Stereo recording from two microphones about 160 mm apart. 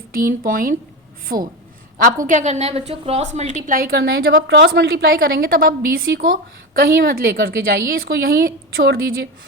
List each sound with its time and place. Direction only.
0.1 s speech: 60° right (ahead or behind)
2.2 s a woman's voice: 50° right (ahead or behind); by 9.2 s 85° right